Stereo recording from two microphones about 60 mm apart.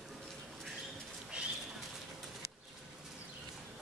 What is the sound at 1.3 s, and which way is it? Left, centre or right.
Bird, centre.